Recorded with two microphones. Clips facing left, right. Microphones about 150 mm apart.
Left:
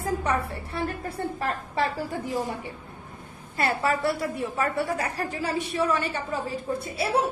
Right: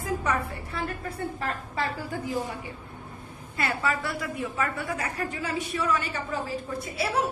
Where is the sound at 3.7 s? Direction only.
30° left (ahead or behind).